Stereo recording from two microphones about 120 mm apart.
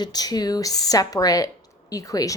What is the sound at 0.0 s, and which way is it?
A woman's voice, 35° left (ahead or behind).